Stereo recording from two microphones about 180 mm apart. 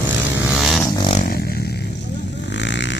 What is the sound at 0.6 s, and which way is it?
Vehicle, centre (ahead or behind).